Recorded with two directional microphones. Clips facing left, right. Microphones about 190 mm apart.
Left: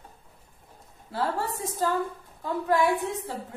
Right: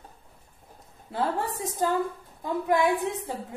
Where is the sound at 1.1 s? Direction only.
15° right (ahead or behind).